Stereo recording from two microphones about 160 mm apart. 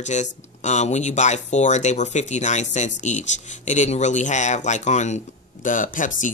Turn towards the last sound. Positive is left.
turn(degrees=55)  # may be behind; listen again after turning